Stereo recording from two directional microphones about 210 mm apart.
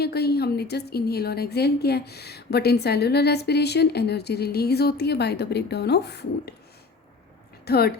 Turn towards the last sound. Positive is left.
turn(degrees=50)  # may be behind; listen again after turning